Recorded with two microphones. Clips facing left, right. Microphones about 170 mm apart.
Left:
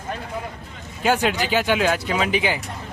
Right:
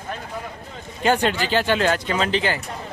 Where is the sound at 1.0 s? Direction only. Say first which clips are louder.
Even; 5° left (ahead or behind).